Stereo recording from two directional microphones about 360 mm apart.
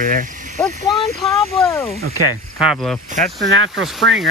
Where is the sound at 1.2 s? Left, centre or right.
Centre.